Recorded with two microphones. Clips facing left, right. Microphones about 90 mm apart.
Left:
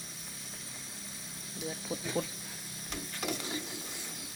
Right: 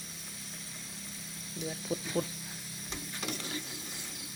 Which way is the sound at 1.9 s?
15° left (ahead or behind).